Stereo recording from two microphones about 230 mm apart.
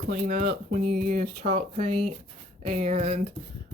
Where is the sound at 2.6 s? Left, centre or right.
Right.